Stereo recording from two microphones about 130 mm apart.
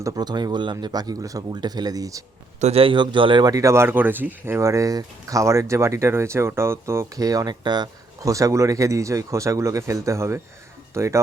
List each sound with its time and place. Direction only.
0.0 s speech: 30° right (ahead or behind)
2.6 s a man's voice: 55° right (ahead or behind); by 11.2 s 20° right (ahead or behind)